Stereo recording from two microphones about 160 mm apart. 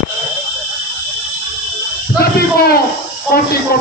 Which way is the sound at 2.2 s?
75° left (ahead or behind).